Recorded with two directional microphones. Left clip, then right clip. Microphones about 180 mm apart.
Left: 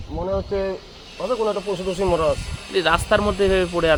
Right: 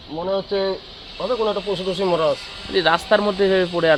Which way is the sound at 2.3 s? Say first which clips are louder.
Right 1 dB; 5° right (ahead or behind).